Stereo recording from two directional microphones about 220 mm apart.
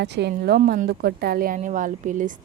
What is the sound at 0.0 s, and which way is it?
A woman's voice, 50° right (ahead or behind).